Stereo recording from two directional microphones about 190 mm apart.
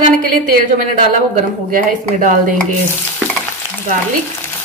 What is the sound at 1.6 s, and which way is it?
Speech, 45° right (ahead or behind).